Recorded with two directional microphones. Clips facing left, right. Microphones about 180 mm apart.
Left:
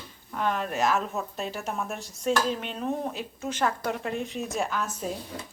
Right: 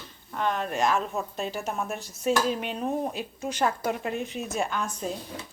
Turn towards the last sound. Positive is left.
turn(degrees=5)  # may be behind; listen again after turning